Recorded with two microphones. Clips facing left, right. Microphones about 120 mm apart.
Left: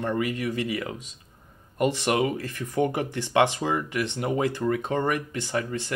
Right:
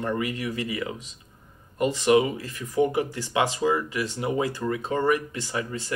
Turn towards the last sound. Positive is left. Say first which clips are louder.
# left 2 dB
turn(degrees=50)  # may be behind; listen again after turning